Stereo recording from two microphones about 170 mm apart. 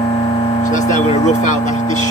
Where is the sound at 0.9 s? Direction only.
45° left (ahead or behind).